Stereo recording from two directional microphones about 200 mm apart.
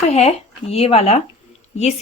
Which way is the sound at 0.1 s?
30° left (ahead or behind).